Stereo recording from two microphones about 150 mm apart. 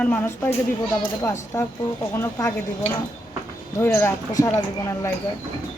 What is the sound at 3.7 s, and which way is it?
Speech, 15° left (ahead or behind).